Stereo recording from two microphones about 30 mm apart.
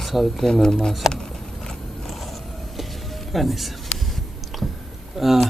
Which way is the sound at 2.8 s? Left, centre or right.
Centre.